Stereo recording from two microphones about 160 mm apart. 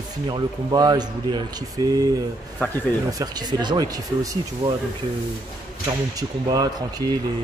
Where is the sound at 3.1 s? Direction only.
25° right (ahead or behind).